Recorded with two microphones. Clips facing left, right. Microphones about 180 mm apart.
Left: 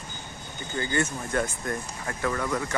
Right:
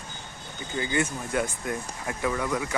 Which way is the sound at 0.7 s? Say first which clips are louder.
Even; 15° right (ahead or behind).